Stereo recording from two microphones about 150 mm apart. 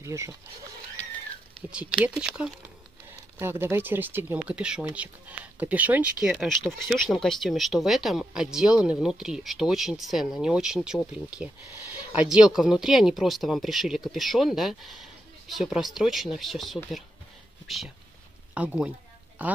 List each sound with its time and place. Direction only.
0.0 s speech: 20° right (ahead or behind)
1.7 s speech: 5° right (ahead or behind)
3.3 s speech: 15° right (ahead or behind)